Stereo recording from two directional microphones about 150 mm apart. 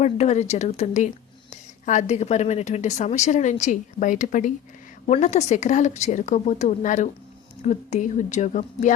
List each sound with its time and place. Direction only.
0.0 s a woman's voice: 50° left (ahead or behind)